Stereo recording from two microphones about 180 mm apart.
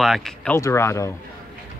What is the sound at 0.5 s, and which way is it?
Speech, 15° left (ahead or behind).